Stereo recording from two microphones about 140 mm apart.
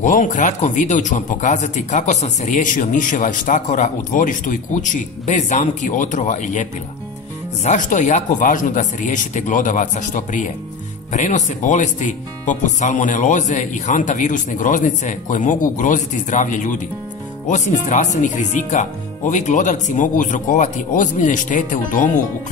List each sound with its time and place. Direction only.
0.0 s speech: 65° left (ahead or behind)